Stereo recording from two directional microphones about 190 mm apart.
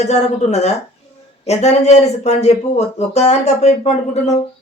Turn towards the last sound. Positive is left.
turn(degrees=35)  # may be behind; listen again after turning